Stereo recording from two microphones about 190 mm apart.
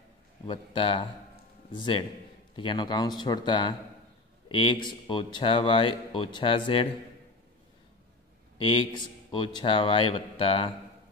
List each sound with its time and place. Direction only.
0.5 s speech: 25° left (ahead or behind)
8.5 s speech: 30° left (ahead or behind)